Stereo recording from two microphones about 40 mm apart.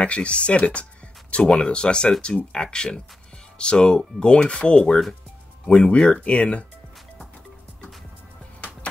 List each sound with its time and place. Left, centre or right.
0.0 s speech: left